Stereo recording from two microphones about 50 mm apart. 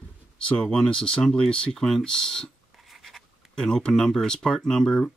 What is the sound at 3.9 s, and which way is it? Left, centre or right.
Speech, centre.